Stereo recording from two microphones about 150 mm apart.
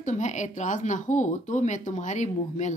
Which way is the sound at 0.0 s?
55° left (ahead or behind).